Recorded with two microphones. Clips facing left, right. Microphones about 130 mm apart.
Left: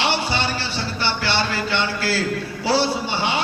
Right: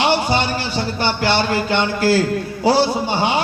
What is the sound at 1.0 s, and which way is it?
A man's voice, 45° right (ahead or behind).